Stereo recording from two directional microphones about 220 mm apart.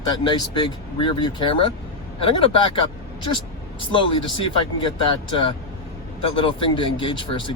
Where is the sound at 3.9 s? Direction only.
25° left (ahead or behind).